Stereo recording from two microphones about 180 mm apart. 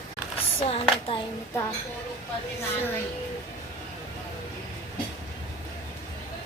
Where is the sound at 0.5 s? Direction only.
30° left (ahead or behind).